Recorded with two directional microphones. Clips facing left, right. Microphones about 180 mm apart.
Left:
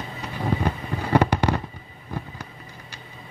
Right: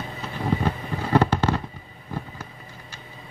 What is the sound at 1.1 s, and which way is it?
Fireworks, 15° left (ahead or behind).